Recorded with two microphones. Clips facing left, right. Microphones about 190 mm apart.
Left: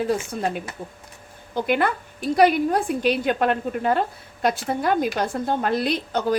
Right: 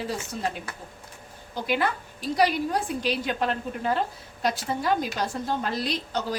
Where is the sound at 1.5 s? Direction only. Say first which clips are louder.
Left 5 dB; 55° left (ahead or behind).